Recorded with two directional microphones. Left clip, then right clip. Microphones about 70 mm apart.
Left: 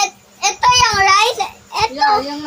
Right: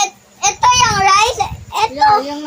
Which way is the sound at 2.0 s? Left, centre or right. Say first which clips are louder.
Right 4 dB; centre.